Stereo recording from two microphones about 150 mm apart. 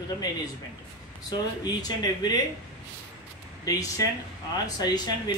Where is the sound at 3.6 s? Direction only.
25° left (ahead or behind).